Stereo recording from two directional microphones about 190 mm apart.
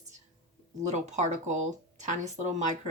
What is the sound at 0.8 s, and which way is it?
Speech, 40° right (ahead or behind).